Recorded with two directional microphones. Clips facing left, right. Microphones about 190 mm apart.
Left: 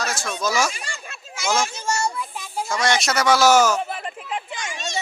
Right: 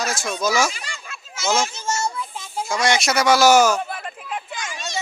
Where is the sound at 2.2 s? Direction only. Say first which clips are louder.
Even; 20° right (ahead or behind).